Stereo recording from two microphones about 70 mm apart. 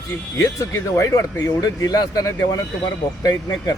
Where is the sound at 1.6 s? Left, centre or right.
Left.